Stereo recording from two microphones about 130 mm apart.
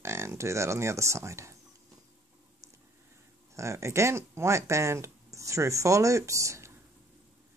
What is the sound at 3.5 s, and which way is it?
Speech, 20° right (ahead or behind).